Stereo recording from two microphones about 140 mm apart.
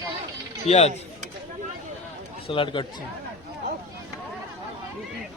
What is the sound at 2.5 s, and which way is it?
Speech, 35° left (ahead or behind).